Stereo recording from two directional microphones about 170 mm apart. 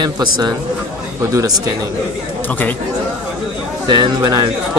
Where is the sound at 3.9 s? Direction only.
25° right (ahead or behind).